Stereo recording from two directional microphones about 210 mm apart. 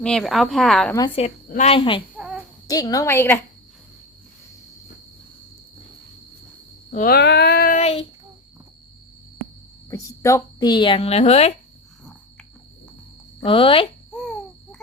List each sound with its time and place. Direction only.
0.0 s speech: 5° left (ahead or behind)
0.9 s speech: 25° left (ahead or behind)
2.1 s a sound: 5° right (ahead or behind)
2.6 s a woman's voice: 15° left (ahead or behind)
6.9 s a sound: 45° left (ahead or behind)
7.8 s child singing: 30° left (ahead or behind)
9.9 s speech: 15° left (ahead or behind); by 11.5 s 30° left (ahead or behind)
13.4 s speech: 25° left (ahead or behind)
14.1 s a sound: 5° left (ahead or behind)